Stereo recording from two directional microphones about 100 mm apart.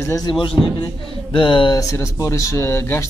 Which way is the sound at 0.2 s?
55° left (ahead or behind).